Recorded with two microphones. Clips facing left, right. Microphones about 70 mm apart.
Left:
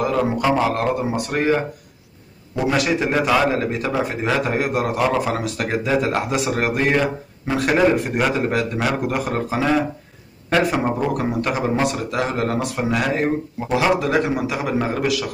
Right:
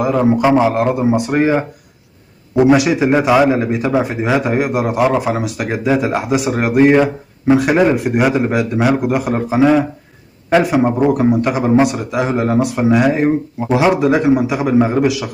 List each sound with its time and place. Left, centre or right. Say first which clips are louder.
0.0 s a man's voice: right 6 dB; centre
2.7 s a man's voice: right 5 dB; centre
11.2 s a man's voice: right 7 dB; centre